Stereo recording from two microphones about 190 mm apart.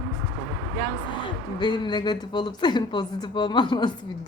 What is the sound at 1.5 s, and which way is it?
Speech, 25° left (ahead or behind).